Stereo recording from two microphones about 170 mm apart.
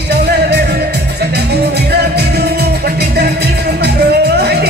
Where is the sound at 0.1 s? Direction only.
70° right (ahead or behind).